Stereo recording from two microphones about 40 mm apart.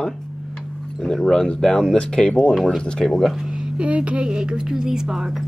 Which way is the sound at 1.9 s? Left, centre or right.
Left.